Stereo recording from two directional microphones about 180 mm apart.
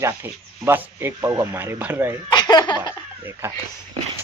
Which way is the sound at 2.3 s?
25° left (ahead or behind).